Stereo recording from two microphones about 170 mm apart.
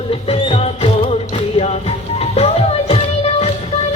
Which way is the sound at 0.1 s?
35° left (ahead or behind).